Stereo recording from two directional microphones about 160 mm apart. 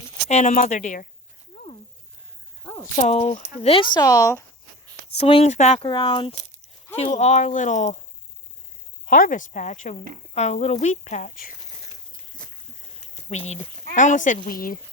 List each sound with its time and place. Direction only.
0.3 s speech: 45° left (ahead or behind)
3.0 s speech: 40° left (ahead or behind); by 4.4 s 20° left (ahead or behind)
5.1 s speech: 35° left (ahead or behind)
5.9 s speech: 30° left (ahead or behind)
6.9 s speech: 45° left (ahead or behind)
9.0 s speech: 55° left (ahead or behind)
13.3 s speech: 45° left (ahead or behind); by 14.8 s 60° left (ahead or behind)